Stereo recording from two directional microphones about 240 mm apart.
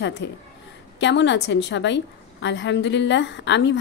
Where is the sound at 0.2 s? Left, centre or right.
Left.